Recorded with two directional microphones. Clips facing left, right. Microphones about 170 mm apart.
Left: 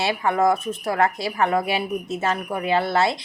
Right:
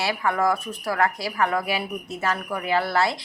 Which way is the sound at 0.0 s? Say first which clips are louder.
Left 3 dB; 25° left (ahead or behind).